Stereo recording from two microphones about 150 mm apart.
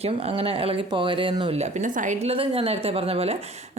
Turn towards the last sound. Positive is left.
turn(degrees=-40)  # may be behind; listen again after turning